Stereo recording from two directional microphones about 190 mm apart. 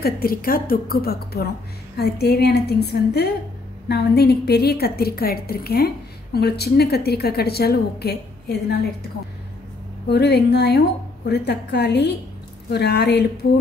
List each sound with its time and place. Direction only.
0.0 s a woman's voice: 50° left (ahead or behind)
10.0 s a woman's voice: 60° left (ahead or behind)